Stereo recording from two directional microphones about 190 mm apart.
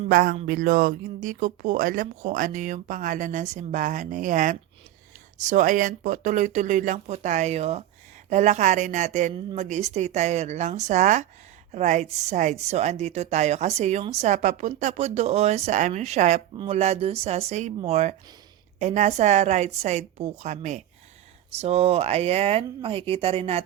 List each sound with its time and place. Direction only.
0.1 s speech: 50° right (ahead or behind)
9.3 s speech: 25° right (ahead or behind)
9.6 s speech: 35° right (ahead or behind)